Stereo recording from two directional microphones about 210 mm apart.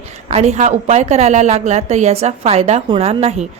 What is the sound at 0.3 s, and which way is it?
A woman's voice, 30° right (ahead or behind).